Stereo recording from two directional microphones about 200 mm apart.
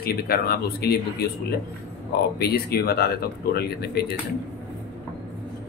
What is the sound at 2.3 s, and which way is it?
Speech, 50° left (ahead or behind).